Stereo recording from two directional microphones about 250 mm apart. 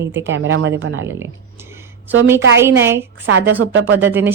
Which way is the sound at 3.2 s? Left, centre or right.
Right.